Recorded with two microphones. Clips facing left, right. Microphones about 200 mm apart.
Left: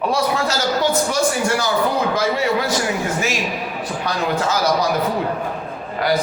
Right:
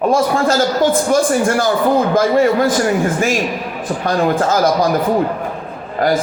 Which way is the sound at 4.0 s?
50° right (ahead or behind).